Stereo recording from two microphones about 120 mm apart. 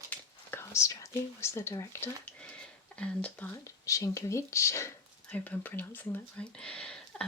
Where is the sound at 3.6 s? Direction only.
25° left (ahead or behind).